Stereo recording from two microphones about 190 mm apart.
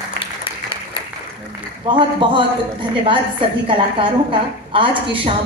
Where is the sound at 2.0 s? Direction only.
25° right (ahead or behind).